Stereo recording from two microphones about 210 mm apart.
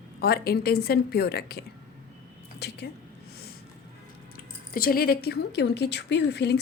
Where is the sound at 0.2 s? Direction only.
45° left (ahead or behind).